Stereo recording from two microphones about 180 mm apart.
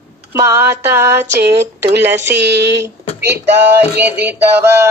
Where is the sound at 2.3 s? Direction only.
70° right (ahead or behind).